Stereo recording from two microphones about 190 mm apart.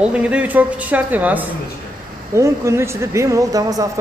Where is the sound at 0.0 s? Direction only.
5° right (ahead or behind).